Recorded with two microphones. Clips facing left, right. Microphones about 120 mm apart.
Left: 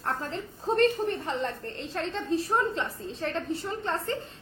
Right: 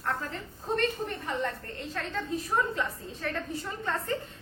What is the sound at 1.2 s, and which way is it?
A woman's voice, 30° left (ahead or behind).